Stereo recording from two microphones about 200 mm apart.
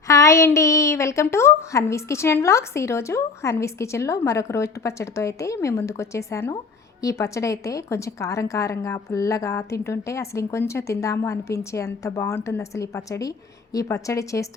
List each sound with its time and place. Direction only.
0.1 s a woman's voice: 15° left (ahead or behind)